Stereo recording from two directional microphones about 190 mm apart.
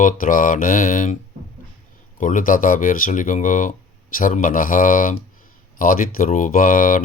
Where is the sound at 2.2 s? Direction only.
45° left (ahead or behind).